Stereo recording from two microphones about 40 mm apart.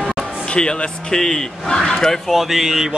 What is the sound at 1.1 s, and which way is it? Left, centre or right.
A man's voice, centre.